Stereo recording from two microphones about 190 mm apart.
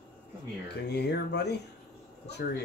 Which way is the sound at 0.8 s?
60° left (ahead or behind).